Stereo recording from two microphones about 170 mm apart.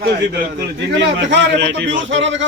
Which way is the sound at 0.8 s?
90° right.